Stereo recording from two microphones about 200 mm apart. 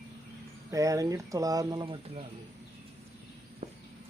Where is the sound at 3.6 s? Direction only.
35° right (ahead or behind).